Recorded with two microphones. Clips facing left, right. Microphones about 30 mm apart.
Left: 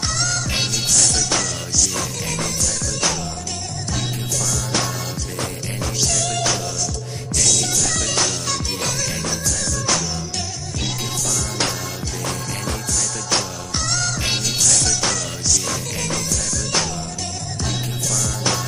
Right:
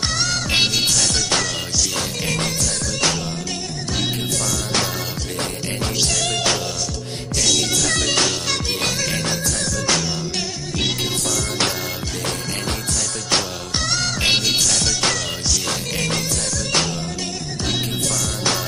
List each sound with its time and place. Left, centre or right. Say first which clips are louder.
0.0 s music: right 1 dB; right
5.9 s music: even; right
6.2 s music: right 1 dB; right
7.4 s music: right 2 dB; right
13.8 s music: right 4 dB; right